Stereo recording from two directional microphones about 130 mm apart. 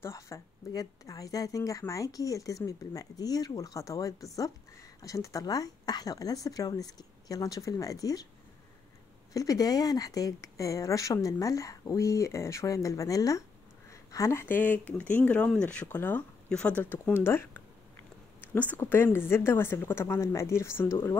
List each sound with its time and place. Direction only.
0.0 s speech: 25° left (ahead or behind)
9.3 s speech: 25° left (ahead or behind)